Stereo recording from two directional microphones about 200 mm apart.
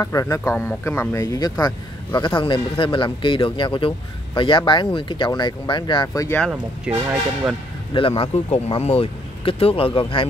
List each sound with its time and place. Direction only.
0.0 s speech: 15° left (ahead or behind)
6.5 s speech: 10° right (ahead or behind)
7.9 s speech: 25° left (ahead or behind)